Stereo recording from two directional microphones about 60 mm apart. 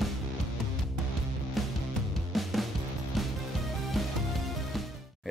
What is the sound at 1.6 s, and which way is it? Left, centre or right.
Music, centre.